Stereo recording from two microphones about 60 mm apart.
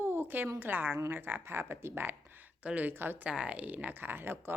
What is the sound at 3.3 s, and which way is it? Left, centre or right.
Speech, centre.